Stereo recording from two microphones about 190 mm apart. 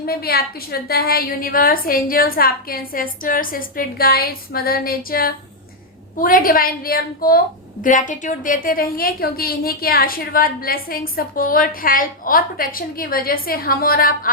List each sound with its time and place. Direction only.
0.0 s a woman's voice: 55° left (ahead or behind)